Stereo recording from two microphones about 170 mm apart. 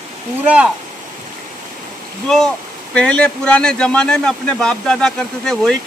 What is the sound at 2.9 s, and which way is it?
A man's voice, 5° left (ahead or behind).